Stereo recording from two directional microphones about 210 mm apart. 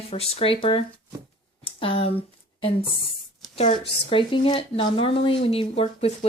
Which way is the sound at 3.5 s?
30° left (ahead or behind).